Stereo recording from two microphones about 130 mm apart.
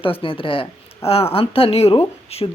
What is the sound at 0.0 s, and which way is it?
Speech, 45° left (ahead or behind).